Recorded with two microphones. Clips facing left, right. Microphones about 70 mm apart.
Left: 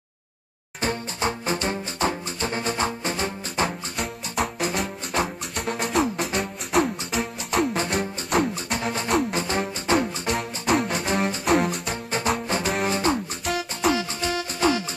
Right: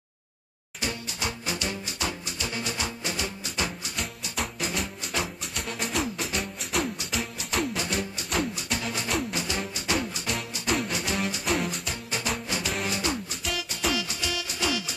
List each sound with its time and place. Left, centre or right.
0.7 s music: left
4.4 s music: left
6.3 s music: left
7.7 s music: left